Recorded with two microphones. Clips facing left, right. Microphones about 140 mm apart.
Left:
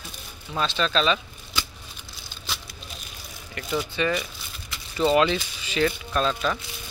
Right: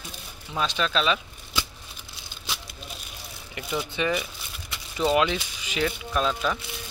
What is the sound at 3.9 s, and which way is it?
Speech, 15° right (ahead or behind).